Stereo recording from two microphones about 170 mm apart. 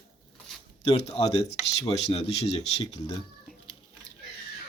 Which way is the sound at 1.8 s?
35° left (ahead or behind).